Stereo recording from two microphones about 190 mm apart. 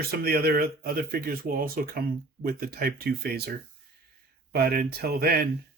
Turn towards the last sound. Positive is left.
turn(degrees=-55)  # may be behind; listen again after turning